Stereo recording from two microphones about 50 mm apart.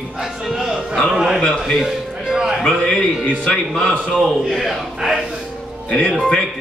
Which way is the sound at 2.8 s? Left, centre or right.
Centre.